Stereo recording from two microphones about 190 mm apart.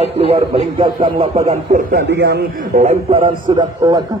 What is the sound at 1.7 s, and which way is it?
A man's voice, 55° right (ahead or behind).